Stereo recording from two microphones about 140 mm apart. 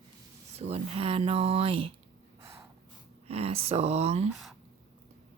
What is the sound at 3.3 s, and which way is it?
Speech, 45° right (ahead or behind).